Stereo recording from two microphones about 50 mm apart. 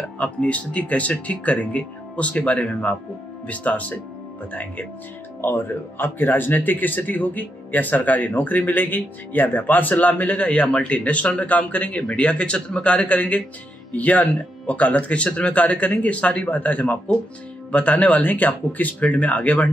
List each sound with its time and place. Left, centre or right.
0.2 s speech: left
5.4 s speech: left